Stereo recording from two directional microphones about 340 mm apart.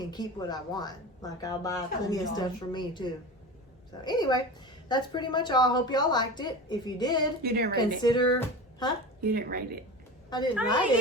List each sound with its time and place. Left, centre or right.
0.0 s speech: centre
7.4 s speech: right
8.0 s speech: centre
9.2 s speech: right
10.2 s a woman's voice: centre